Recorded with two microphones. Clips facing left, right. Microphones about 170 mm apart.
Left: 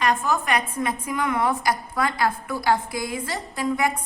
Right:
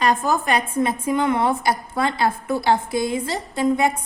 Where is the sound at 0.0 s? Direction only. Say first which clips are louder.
Right 3 dB; 35° right (ahead or behind).